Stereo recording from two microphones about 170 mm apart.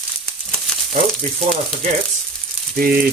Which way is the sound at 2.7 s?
60° right (ahead or behind).